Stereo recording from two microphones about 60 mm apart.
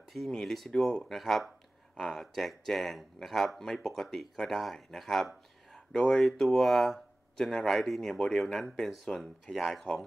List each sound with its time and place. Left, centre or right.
0.1 s speech: centre